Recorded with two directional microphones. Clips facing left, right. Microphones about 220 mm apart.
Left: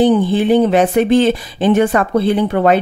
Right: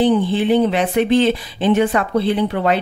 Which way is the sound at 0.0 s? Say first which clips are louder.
Left 3 dB; 45° left (ahead or behind).